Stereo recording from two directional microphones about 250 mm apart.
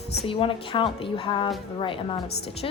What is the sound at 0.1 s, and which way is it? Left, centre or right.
A woman's voice, left.